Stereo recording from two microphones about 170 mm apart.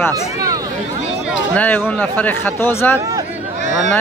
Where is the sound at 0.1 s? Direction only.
20° right (ahead or behind).